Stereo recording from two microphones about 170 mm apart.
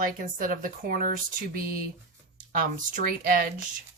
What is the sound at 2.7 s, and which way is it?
Speech, 50° right (ahead or behind).